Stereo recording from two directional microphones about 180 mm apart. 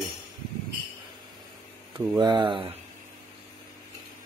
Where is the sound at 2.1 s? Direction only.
25° right (ahead or behind).